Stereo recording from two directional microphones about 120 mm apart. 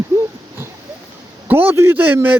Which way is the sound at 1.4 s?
15° right (ahead or behind).